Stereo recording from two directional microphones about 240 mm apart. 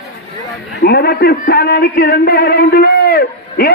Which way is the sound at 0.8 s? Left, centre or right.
Left.